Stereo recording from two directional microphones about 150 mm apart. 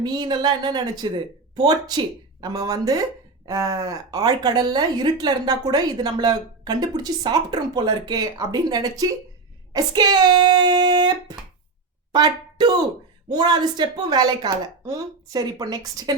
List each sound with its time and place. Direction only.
0.0 s speech: 30° right (ahead or behind)